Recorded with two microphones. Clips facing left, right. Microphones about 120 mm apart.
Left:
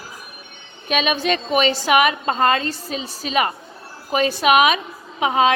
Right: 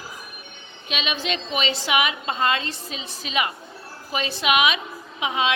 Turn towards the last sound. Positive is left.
turn(degrees=45)  # may be behind; listen again after turning